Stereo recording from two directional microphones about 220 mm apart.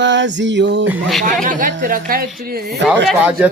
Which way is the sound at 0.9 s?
Centre (ahead or behind).